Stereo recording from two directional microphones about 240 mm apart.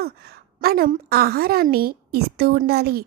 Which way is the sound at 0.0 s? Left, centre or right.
Right.